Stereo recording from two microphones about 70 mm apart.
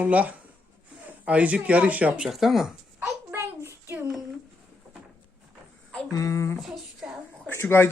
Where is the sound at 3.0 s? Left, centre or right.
Right.